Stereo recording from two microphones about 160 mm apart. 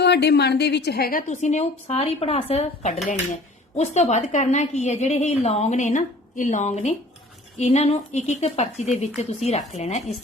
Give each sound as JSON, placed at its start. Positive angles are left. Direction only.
{"t": 0.0, "sound": "a woman's voice", "side_deg": 90}
{"t": 1.3, "sound": "a woman's voice", "side_deg": 45}